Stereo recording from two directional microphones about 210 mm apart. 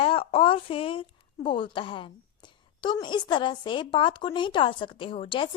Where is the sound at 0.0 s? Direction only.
25° left (ahead or behind).